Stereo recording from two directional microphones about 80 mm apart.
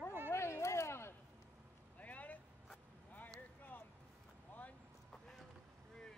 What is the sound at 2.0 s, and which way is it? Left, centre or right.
Vehicle, centre.